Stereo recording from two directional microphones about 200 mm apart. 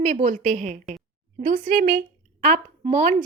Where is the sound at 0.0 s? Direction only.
40° right (ahead or behind).